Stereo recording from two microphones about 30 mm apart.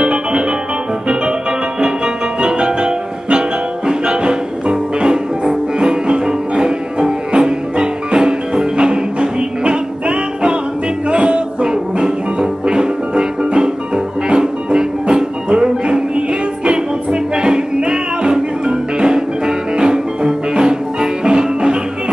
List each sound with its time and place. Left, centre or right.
0.0 s music: right
2.4 s music: right